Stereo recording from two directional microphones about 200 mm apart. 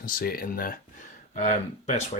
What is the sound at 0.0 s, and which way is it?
Speech, 45° left (ahead or behind).